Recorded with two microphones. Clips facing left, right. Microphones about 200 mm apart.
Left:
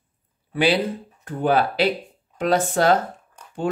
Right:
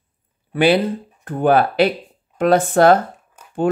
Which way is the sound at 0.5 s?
55° right (ahead or behind).